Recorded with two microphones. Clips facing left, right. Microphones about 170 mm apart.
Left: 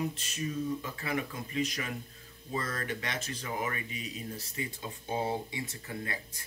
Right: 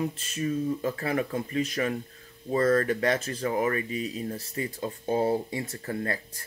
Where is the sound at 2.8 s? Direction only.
40° right (ahead or behind).